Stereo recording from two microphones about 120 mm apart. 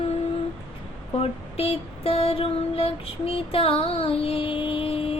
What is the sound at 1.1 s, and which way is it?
Female singing, 55° left (ahead or behind).